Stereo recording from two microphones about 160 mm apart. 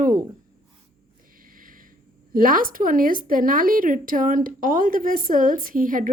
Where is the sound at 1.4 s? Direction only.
60° right (ahead or behind).